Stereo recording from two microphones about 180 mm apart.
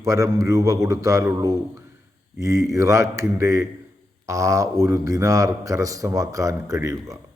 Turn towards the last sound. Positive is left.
turn(degrees=-20)  # may be behind; listen again after turning